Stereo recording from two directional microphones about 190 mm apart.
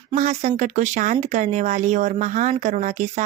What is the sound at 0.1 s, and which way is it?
Speech, 35° right (ahead or behind).